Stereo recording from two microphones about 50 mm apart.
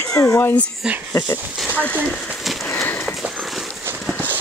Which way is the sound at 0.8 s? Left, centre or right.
Centre.